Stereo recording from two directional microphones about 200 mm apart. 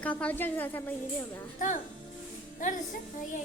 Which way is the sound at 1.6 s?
40° left (ahead or behind).